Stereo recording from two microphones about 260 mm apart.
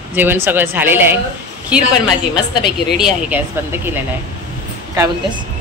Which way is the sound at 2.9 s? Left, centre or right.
Centre.